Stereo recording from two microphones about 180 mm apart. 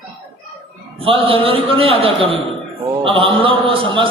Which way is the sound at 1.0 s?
30° right (ahead or behind).